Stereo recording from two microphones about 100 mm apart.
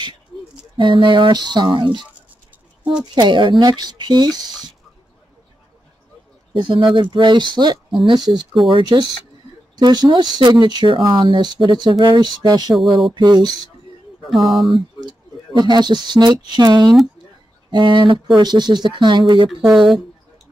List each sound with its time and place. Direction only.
0.7 s speech: 55° right (ahead or behind)
3.2 s speech: 50° right (ahead or behind)
6.5 s speech: 55° right (ahead or behind)
12.7 s speech: centre (ahead or behind)
13.1 s speech: 45° right (ahead or behind)
14.2 s speech: centre (ahead or behind)
15.0 s speech: 45° right (ahead or behind)